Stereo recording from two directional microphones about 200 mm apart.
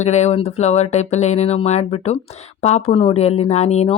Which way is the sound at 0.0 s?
35° left (ahead or behind).